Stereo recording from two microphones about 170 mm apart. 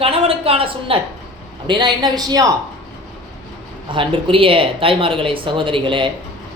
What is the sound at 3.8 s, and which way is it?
A woman's voice, 30° right (ahead or behind).